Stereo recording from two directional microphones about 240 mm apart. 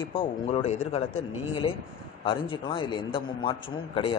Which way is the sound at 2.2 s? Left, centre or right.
Left.